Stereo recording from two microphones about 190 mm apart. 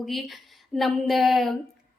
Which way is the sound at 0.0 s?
Centre (ahead or behind).